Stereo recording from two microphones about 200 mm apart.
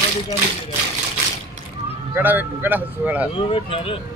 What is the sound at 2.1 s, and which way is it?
Music, 10° right (ahead or behind).